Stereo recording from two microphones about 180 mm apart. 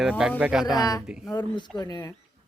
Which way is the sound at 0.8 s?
20° left (ahead or behind).